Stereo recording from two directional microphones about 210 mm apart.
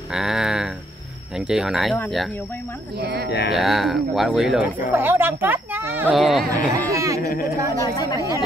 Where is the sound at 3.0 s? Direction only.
50° right (ahead or behind).